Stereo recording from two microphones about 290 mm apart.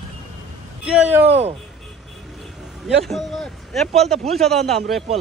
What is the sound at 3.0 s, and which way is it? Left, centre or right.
A man's voice, centre.